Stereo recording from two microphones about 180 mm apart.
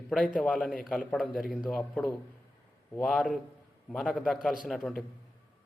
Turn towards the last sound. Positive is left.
turn(degrees=0)  # may be behind; listen again after turning